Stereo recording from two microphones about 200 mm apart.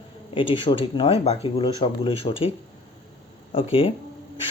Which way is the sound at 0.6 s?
25° left (ahead or behind).